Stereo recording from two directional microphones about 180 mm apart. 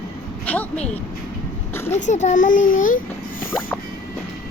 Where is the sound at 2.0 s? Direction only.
40° left (ahead or behind).